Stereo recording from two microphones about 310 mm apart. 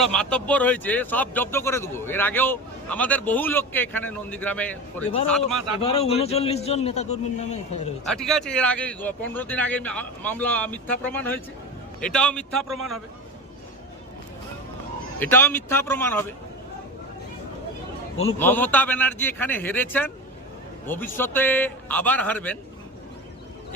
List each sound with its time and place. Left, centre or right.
0.0 s speech: centre
5.8 s a man's voice: centre
8.0 s speech: centre
15.2 s speech: centre
18.3 s speech: centre